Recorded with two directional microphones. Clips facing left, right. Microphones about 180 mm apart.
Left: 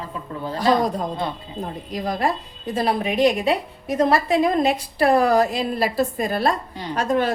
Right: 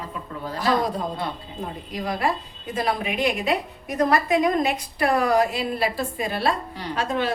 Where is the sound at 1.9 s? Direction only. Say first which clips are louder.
Left 2 dB; 40° left (ahead or behind).